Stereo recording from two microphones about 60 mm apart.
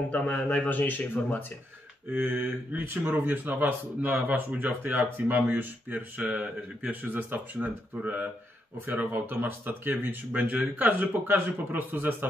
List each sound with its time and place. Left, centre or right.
0.1 s a man's voice: centre
0.7 s speech: left
2.0 s speech: right